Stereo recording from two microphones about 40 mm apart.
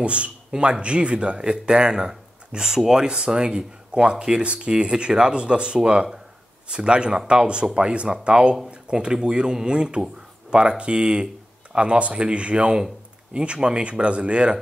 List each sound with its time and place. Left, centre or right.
0.0 s speech: right; by 3.1 s centre
3.1 s speech: right